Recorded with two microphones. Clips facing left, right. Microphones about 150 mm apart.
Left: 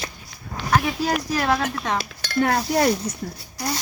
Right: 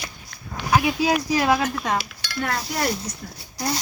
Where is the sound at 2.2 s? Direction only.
50° left (ahead or behind).